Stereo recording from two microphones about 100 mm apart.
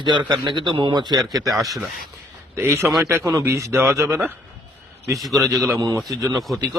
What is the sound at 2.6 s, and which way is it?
Speech, 25° right (ahead or behind).